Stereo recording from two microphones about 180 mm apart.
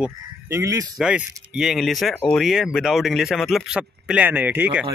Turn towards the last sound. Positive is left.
turn(degrees=-10)  # may be behind; listen again after turning